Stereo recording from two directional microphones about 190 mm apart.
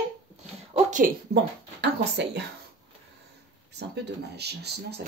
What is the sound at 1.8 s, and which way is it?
Speech, 60° right (ahead or behind).